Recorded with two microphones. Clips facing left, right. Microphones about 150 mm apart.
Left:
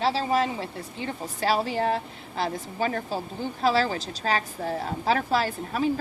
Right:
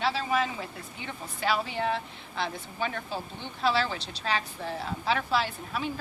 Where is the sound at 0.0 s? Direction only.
35° left (ahead or behind).